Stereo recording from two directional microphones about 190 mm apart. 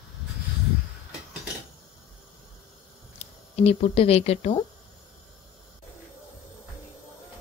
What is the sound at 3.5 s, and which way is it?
Speech, 35° left (ahead or behind).